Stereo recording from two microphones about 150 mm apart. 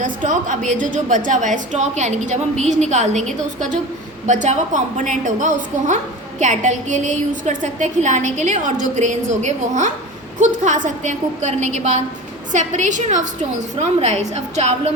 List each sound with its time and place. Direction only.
0.0 s a woman's voice: 60° right (ahead or behind)
4.3 s a woman's voice: 55° right (ahead or behind)